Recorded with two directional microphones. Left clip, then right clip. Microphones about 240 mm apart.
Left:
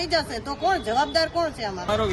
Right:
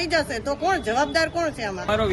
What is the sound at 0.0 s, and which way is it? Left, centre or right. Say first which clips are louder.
Speech: right 2 dB; centre.